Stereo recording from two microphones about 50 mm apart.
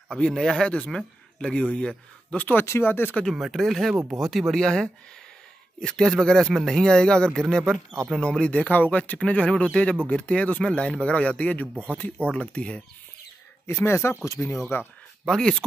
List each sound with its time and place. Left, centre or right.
0.1 s speech: centre
2.8 s speech: left
3.3 s speech: centre
4.6 s speech: centre; by 9.2 s left
9.2 s speech: centre
13.7 s speech: left
15.2 s speech: centre